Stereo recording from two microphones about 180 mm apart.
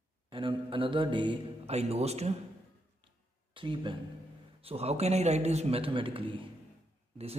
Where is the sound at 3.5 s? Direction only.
25° right (ahead or behind).